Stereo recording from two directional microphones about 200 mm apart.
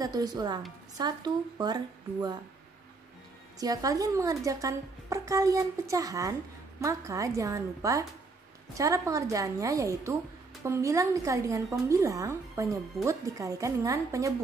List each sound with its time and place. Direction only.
0.0 s a woman's voice: 20° right (ahead or behind)
3.5 s a woman's voice: 20° right (ahead or behind)